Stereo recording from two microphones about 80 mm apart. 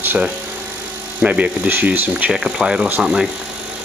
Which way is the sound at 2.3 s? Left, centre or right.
Centre.